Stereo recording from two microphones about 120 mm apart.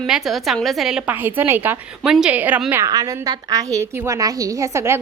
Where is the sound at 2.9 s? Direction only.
30° right (ahead or behind).